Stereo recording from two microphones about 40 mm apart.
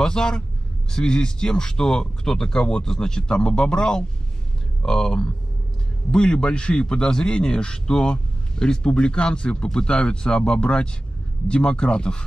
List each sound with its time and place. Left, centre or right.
0.0 s speech: centre